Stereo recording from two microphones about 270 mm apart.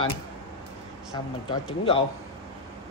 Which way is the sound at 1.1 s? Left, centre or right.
Centre.